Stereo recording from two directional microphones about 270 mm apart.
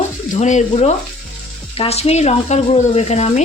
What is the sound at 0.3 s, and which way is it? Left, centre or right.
Speech, left.